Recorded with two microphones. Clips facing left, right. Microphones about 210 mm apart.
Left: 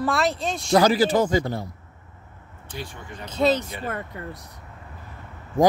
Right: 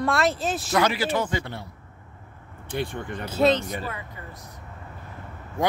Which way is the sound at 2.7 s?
55° right (ahead or behind).